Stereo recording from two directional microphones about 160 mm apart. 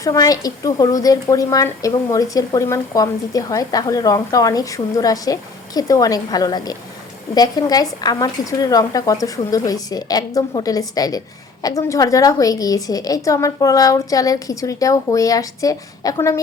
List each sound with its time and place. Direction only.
0.0 s a woman's voice: 20° left (ahead or behind)